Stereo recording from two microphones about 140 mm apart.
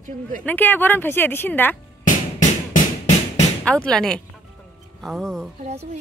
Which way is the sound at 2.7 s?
55° left (ahead or behind).